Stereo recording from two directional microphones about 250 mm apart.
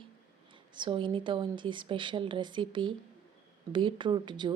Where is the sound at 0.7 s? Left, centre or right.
Centre.